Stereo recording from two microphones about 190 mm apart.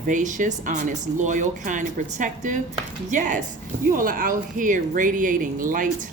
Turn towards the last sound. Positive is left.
turn(degrees=-45)  # may be behind; listen again after turning